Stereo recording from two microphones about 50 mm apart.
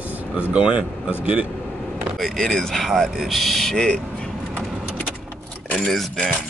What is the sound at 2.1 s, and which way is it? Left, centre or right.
Speech, centre.